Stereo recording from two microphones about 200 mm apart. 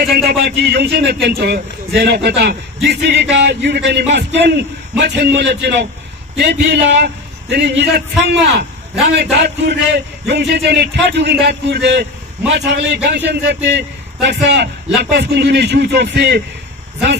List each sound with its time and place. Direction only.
0.0 s a man's voice: 55° right (ahead or behind)
9.0 s a man's voice: 55° right (ahead or behind)